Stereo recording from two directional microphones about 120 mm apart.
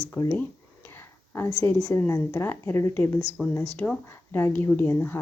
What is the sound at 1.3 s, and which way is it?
A woman's voice, 20° left (ahead or behind).